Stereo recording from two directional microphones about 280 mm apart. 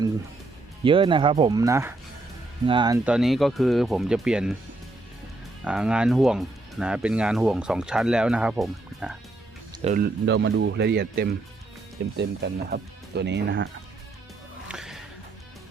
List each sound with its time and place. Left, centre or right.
0.9 s speech: centre
5.6 s speech: centre
9.7 s speech: right
14.7 s music: centre